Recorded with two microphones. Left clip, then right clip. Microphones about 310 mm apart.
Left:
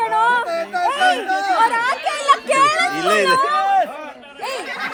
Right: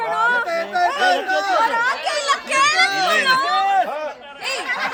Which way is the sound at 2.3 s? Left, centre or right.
Centre.